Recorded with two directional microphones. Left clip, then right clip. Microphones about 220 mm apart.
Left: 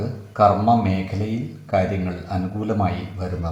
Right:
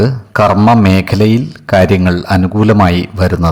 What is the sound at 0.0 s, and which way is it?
Speech, 45° right (ahead or behind).